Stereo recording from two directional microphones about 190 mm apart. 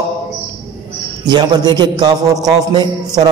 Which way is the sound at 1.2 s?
20° right (ahead or behind).